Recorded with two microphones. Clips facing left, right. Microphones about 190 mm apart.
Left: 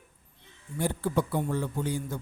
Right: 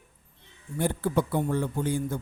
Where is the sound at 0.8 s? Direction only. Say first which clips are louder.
Right 2 dB; 55° right (ahead or behind).